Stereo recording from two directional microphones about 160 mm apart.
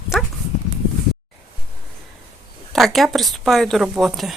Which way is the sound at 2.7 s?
Centre (ahead or behind).